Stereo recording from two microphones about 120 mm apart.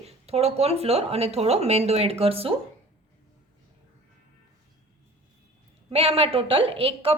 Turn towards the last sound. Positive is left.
turn(degrees=-50)  # may be behind; listen again after turning